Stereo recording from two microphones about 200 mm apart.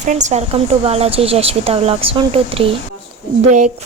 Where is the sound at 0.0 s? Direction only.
35° right (ahead or behind).